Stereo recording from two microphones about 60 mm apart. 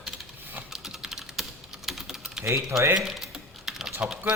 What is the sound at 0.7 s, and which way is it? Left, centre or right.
Typing, centre.